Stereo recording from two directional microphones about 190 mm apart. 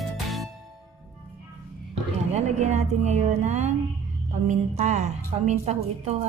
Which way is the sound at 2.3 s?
35° right (ahead or behind).